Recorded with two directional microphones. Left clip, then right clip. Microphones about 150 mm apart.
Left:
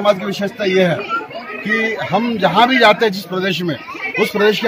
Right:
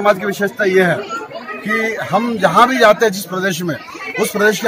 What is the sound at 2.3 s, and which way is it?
Speech, 30° left (ahead or behind).